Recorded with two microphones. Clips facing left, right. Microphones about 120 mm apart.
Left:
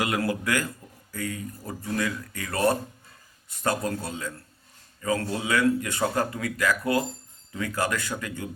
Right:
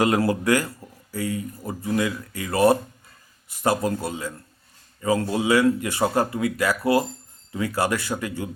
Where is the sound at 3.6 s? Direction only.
25° right (ahead or behind).